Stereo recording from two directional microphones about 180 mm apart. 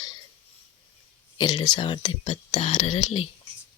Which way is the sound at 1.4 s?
25° left (ahead or behind).